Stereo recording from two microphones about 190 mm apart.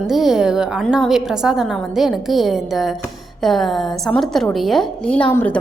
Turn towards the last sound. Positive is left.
turn(degrees=10)  # may be behind; listen again after turning